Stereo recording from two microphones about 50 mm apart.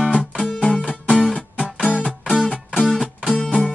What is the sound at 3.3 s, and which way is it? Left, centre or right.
Music, left.